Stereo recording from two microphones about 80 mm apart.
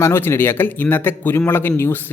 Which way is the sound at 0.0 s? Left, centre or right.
Left.